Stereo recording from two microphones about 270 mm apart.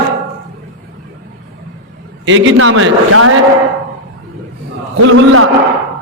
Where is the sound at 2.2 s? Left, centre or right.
Right.